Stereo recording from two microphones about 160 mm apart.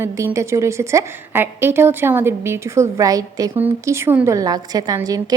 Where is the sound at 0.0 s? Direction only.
15° right (ahead or behind).